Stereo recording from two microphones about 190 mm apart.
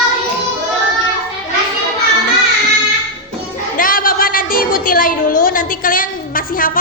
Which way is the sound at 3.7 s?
45° left (ahead or behind).